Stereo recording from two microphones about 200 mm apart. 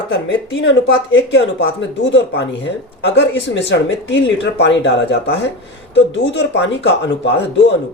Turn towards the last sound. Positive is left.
turn(degrees=65)  # may be behind; listen again after turning